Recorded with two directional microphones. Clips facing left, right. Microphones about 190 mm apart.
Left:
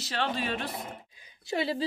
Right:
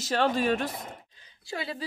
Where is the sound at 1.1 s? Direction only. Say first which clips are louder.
Left 2 dB; 10° left (ahead or behind).